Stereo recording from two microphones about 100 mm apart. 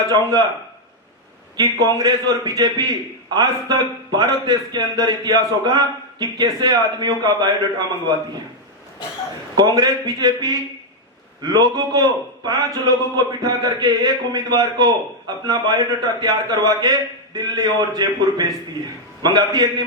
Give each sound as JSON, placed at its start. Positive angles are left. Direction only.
{"t": 0.1, "sound": "a man's voice", "side_deg": -45}
{"t": 1.5, "sound": "a man's voice", "side_deg": -40}
{"t": 9.6, "sound": "a man's voice", "side_deg": -40}